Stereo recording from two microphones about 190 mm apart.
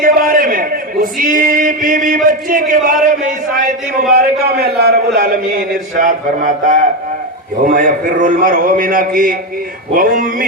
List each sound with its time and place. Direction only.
0.0 s a man's voice: 50° right (ahead or behind)
4.1 s a man's voice: 55° right (ahead or behind)
5.2 s a man's voice: 45° right (ahead or behind)